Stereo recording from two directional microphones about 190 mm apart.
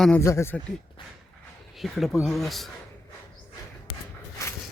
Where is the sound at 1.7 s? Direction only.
Centre (ahead or behind).